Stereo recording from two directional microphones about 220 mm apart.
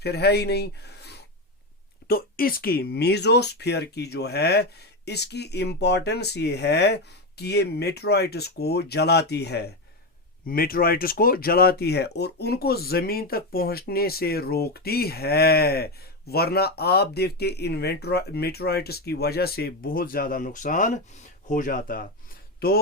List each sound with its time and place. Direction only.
0.0 s speech: 50° left (ahead or behind)